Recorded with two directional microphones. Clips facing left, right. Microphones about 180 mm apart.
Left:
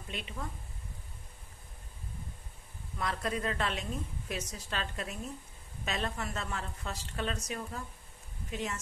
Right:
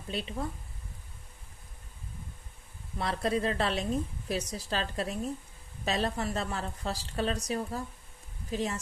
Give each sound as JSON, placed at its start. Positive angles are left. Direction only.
{"t": 0.1, "sound": "a woman's voice", "side_deg": -35}
{"t": 3.0, "sound": "a woman's voice", "side_deg": -30}